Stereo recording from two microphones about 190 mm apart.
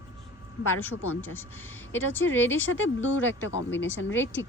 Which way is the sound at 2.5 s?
90° left.